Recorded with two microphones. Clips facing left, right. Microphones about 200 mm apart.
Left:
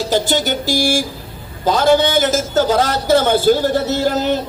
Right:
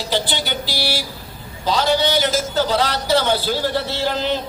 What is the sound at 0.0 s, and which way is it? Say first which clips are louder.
A man's voice: left 6 dB; 45° left (ahead or behind).